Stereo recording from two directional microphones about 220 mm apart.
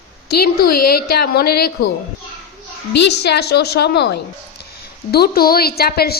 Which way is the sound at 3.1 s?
50° left (ahead or behind).